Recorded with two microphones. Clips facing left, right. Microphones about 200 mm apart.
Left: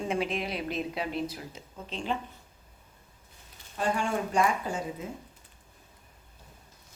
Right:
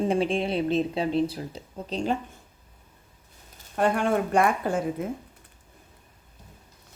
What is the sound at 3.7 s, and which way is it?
Speech, 60° right (ahead or behind).